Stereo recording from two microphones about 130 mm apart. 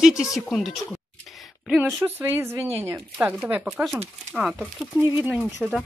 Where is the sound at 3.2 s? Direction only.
5° right (ahead or behind).